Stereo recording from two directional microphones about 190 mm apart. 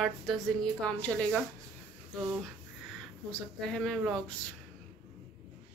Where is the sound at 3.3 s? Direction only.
5° left (ahead or behind).